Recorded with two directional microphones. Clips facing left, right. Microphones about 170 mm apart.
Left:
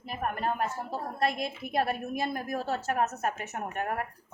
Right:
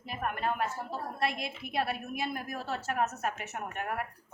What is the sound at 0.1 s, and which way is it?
A woman's voice, 40° left (ahead or behind).